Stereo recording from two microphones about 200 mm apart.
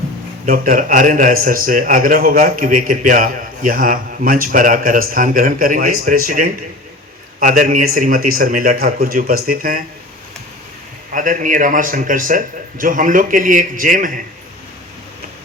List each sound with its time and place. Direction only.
0.4 s a man's voice: 45° right (ahead or behind)
11.1 s a man's voice: 40° right (ahead or behind)